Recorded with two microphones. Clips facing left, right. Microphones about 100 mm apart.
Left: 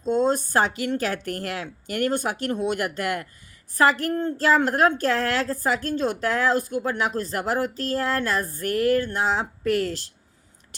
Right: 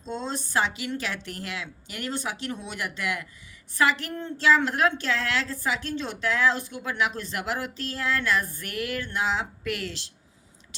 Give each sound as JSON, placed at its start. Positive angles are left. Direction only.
{"t": 0.0, "sound": "a woman's voice", "side_deg": 50}